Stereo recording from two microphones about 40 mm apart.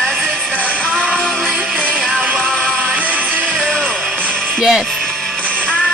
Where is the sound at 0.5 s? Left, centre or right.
Left.